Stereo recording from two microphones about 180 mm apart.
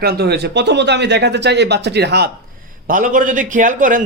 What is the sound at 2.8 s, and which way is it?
A man's voice, 50° right (ahead or behind).